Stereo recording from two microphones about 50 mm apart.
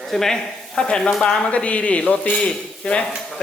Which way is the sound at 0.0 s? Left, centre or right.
Centre.